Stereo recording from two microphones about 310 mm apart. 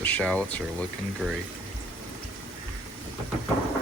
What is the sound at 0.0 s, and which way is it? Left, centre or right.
Speech, centre.